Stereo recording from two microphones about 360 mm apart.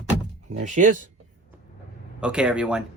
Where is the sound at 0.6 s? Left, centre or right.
Right.